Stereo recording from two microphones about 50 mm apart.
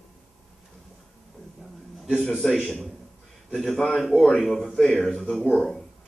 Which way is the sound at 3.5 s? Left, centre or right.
Centre.